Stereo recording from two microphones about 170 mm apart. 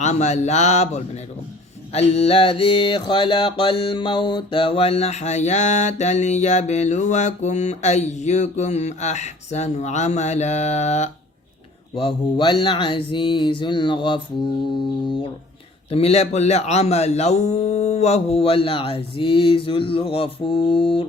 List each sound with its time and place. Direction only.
0.0 s music: 45° left (ahead or behind)
11.9 s speech: 30° left (ahead or behind)
15.9 s music: 35° left (ahead or behind)